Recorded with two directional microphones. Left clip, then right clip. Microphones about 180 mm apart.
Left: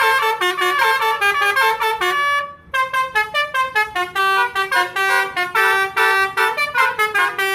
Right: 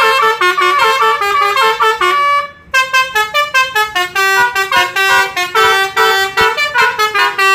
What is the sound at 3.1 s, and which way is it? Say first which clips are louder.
Vehicle: right 6 dB; 35° right (ahead or behind).